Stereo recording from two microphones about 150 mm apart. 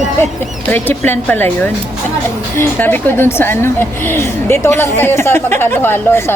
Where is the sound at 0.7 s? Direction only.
15° left (ahead or behind).